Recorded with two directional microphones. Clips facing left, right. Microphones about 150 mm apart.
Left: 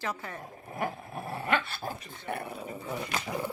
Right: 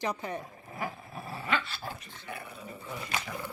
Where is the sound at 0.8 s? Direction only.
55° left (ahead or behind).